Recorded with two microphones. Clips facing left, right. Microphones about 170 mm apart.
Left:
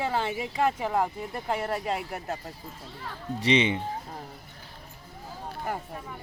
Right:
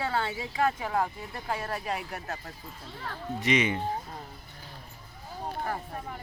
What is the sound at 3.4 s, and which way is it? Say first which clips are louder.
Speech: left 3 dB; 30° left (ahead or behind).